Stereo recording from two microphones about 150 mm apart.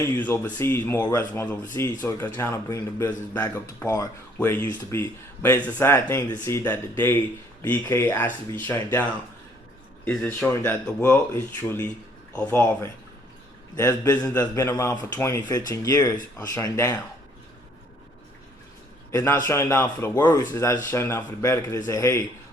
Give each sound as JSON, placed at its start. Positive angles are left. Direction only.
{"t": 0.0, "sound": "a man's voice", "side_deg": 15}
{"t": 19.1, "sound": "a man's voice", "side_deg": 20}